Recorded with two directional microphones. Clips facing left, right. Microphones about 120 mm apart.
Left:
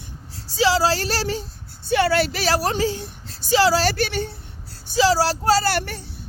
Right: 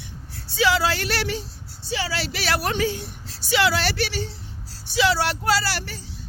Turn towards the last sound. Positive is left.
turn(degrees=55)  # may be behind; listen again after turning